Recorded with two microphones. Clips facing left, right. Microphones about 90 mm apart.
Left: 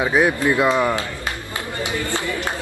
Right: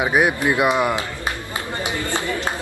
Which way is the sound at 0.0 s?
20° right (ahead or behind).